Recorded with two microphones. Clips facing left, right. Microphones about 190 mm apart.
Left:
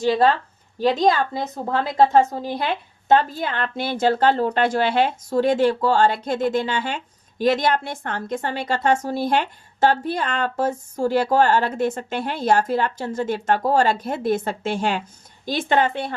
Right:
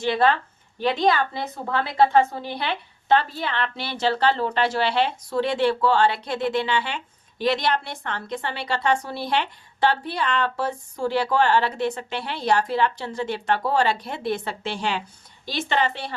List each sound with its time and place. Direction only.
0.0 s a woman's voice: 40° left (ahead or behind)